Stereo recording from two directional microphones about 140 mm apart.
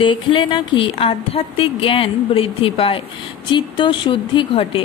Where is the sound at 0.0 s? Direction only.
35° left (ahead or behind).